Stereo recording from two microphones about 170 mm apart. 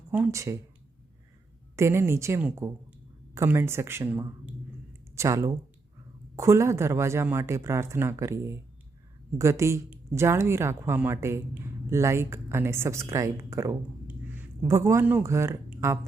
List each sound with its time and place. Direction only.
0.1 s a woman's voice: 15° right (ahead or behind)
1.7 s a woman's voice: 15° right (ahead or behind)